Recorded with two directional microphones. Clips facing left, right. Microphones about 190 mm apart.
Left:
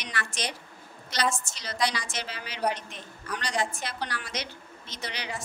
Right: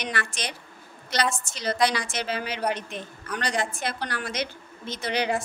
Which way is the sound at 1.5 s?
55° right (ahead or behind).